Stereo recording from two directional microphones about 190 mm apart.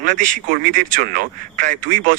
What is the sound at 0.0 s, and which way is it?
Speech, 45° right (ahead or behind).